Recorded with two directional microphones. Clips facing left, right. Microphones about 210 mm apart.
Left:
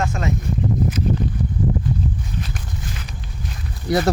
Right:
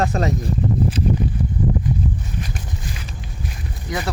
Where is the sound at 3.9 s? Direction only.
35° left (ahead or behind).